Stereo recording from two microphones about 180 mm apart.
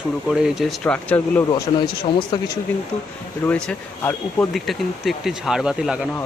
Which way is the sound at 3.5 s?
5° left (ahead or behind).